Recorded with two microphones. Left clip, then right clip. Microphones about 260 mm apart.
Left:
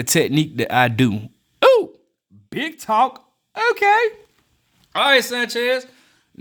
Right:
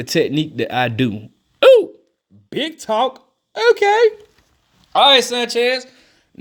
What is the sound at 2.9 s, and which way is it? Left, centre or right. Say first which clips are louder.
Speech: left 2 dB; left.